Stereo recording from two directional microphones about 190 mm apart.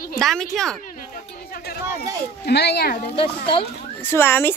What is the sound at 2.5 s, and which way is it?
Speech, 60° left (ahead or behind).